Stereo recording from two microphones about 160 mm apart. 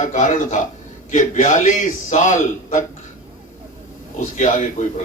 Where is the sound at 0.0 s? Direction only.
50° left (ahead or behind).